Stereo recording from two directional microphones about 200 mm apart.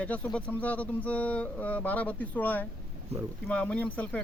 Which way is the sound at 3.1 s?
30° right (ahead or behind).